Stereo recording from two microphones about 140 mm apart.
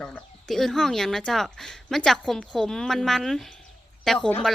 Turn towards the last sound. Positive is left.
turn(degrees=5)  # may be behind; listen again after turning